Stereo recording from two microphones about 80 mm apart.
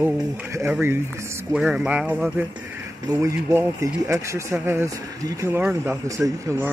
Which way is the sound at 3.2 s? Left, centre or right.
Right.